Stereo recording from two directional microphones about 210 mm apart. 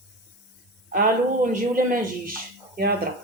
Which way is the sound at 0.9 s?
40° right (ahead or behind).